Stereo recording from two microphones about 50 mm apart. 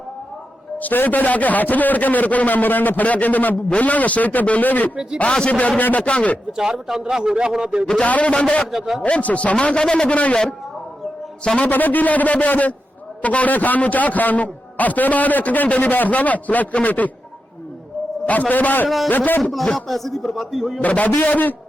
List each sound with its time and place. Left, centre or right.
0.8 s a man's voice: left
5.1 s a man's voice: left
6.6 s a man's voice: centre
8.0 s a man's voice: left
10.1 s a man's voice: left
11.6 s a man's voice: left
18.3 s a man's voice: left
19.4 s a man's voice: centre
20.7 s a man's voice: left